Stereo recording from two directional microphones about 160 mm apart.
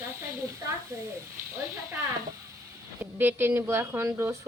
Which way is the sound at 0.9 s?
20° right (ahead or behind).